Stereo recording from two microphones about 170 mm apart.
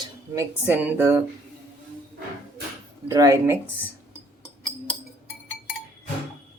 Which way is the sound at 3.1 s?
15° right (ahead or behind).